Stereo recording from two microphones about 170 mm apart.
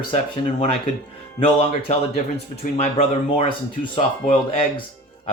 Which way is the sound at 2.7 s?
40° left (ahead or behind).